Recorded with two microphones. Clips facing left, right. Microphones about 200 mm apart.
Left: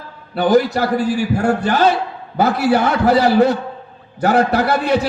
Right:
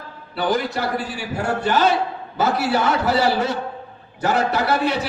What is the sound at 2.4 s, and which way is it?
A man's voice, 55° left (ahead or behind).